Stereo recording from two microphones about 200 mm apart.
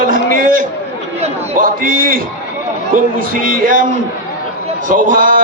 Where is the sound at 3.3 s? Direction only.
45° right (ahead or behind).